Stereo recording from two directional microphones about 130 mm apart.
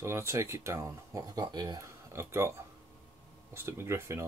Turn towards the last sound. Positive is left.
turn(degrees=-20)  # may be behind; listen again after turning